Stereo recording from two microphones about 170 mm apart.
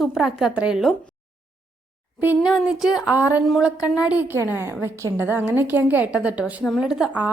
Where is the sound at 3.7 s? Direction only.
20° left (ahead or behind).